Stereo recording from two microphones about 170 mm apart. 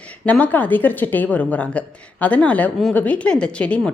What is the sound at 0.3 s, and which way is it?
A woman's voice, 10° left (ahead or behind).